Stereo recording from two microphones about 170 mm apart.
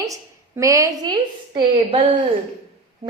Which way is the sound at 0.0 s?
20° right (ahead or behind).